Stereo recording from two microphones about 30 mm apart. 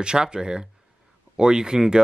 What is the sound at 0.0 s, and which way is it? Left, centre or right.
Speech, right.